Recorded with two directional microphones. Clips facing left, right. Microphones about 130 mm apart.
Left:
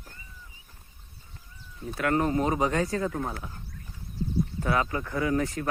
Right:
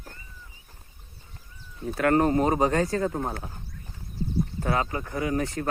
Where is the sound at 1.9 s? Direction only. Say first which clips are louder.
Right 4 dB; 50° right (ahead or behind).